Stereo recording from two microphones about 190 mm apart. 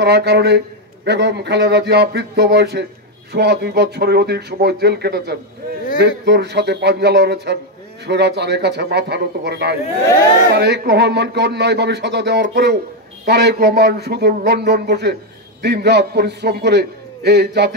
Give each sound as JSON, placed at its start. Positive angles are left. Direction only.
{"t": 0.0, "sound": "speech", "side_deg": -60}